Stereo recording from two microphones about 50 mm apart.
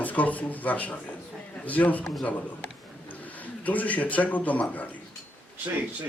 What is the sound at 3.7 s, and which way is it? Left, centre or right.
A man's voice, left.